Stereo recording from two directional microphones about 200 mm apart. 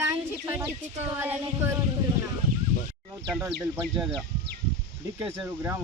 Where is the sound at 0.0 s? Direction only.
15° right (ahead or behind).